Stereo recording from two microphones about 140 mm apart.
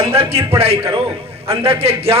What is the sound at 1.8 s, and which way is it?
Speech, 45° right (ahead or behind).